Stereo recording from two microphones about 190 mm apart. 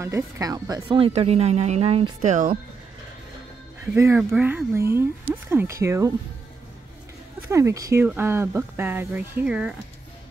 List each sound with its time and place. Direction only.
0.0 s speech: 15° right (ahead or behind); by 2.6 s 40° right (ahead or behind)
3.8 s speech: 15° right (ahead or behind)
7.4 s speech: 15° right (ahead or behind)